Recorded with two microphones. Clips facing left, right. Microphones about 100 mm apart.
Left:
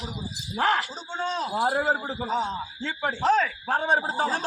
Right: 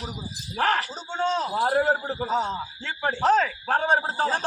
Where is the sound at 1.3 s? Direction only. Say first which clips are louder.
Right 3 dB; 25° right (ahead or behind).